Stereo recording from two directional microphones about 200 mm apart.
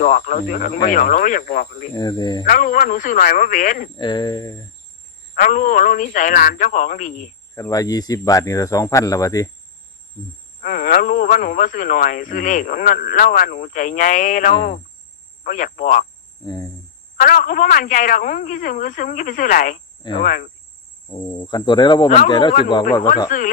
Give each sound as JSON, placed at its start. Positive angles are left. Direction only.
{"t": 0.0, "sound": "speech", "side_deg": 40}
{"t": 2.0, "sound": "speech", "side_deg": 20}
{"t": 2.4, "sound": "speech", "side_deg": 40}
{"t": 3.9, "sound": "speech", "side_deg": 20}
{"t": 5.3, "sound": "speech", "side_deg": 40}
{"t": 7.5, "sound": "speech", "side_deg": 15}
{"t": 10.6, "sound": "speech", "side_deg": 45}
{"t": 17.2, "sound": "speech", "side_deg": 45}
{"t": 20.0, "sound": "cricket", "side_deg": 25}
{"t": 20.2, "sound": "speech", "side_deg": 45}
{"t": 21.3, "sound": "speech", "side_deg": 25}